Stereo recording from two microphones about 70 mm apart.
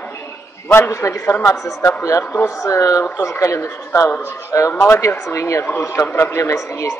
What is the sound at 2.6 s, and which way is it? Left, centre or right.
A woman's voice, left.